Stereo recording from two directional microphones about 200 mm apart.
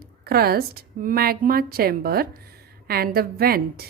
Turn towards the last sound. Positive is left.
turn(degrees=-50)  # may be behind; listen again after turning